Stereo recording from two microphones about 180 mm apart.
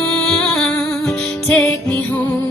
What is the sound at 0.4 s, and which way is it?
Music, 5° left (ahead or behind).